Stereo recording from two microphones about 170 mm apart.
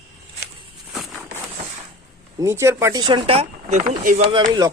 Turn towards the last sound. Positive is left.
turn(degrees=-25)  # may be behind; listen again after turning